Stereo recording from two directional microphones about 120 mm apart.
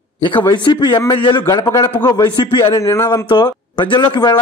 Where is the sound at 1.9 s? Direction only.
15° left (ahead or behind).